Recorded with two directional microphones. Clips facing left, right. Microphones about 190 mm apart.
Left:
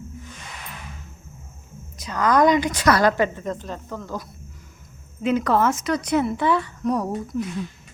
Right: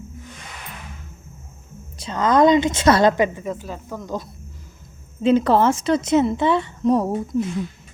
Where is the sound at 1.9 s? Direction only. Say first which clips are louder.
Right 2 dB; 25° right (ahead or behind).